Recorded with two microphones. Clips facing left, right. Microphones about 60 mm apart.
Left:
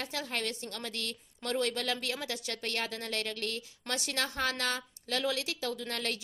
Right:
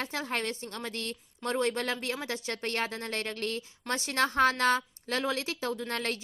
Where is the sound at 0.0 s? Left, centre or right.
Right.